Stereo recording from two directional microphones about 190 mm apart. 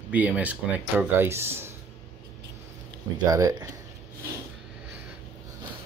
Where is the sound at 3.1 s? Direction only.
20° right (ahead or behind).